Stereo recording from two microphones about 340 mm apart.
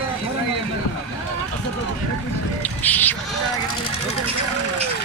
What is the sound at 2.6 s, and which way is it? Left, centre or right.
Speech, centre.